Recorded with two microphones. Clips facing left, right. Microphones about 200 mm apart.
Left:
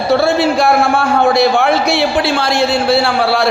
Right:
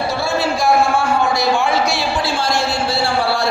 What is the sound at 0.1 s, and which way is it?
A man's voice, 60° left (ahead or behind).